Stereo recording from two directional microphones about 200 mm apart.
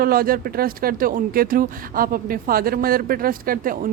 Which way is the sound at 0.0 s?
45° right (ahead or behind).